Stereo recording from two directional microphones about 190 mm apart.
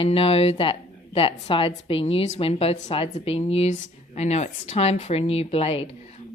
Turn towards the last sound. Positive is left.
turn(degrees=30)  # may be behind; listen again after turning